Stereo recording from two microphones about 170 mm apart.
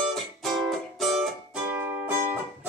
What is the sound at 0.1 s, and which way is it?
Music, centre (ahead or behind).